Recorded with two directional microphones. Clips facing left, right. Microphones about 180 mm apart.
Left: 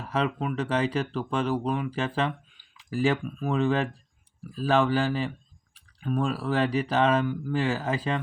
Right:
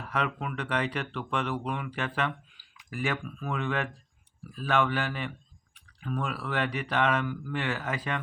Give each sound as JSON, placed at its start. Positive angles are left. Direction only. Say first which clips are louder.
{"t": 0.0, "sound": "speech", "louder": "left 4 dB", "side_deg": 25}
{"t": 5.7, "sound": "clicking", "louder": "left 5 dB", "side_deg": 20}
{"t": 6.2, "sound": "speech", "louder": "left 6 dB", "side_deg": 30}